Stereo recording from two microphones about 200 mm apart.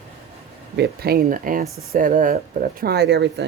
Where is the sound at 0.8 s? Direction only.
50° right (ahead or behind).